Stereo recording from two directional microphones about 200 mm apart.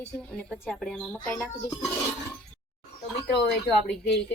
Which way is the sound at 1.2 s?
15° left (ahead or behind).